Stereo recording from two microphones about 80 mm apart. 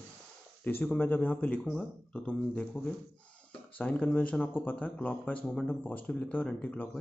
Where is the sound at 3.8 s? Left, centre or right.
Centre.